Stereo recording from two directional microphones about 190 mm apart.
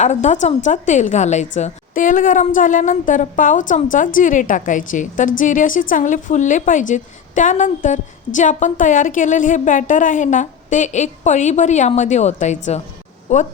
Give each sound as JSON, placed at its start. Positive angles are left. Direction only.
{"t": 0.0, "sound": "a woman's voice", "side_deg": 40}